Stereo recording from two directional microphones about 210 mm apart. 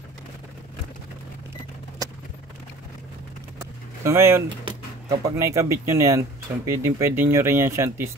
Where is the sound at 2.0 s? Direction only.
15° right (ahead or behind).